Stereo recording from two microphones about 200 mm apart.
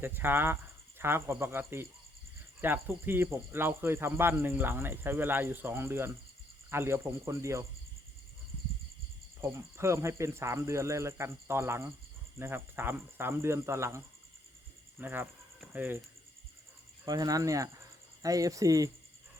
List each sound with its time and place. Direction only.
0.0 s speech: 10° right (ahead or behind)
9.4 s speech: 15° right (ahead or behind)
17.1 s speech: 20° right (ahead or behind)